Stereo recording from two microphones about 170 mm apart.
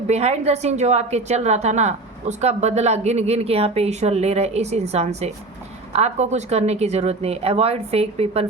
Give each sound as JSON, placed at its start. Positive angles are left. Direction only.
{"t": 0.1, "sound": "a woman's voice", "side_deg": -40}